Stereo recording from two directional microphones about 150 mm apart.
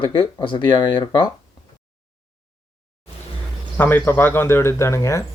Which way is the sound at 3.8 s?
15° left (ahead or behind).